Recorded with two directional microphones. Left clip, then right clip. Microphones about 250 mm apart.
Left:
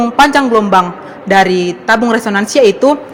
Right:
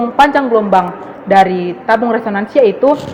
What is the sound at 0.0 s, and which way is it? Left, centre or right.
A woman's voice, left.